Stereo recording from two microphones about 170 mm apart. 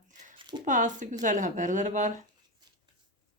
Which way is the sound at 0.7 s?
50° right (ahead or behind).